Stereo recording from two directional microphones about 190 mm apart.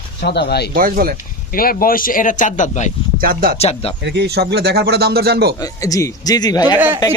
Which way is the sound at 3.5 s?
30° left (ahead or behind).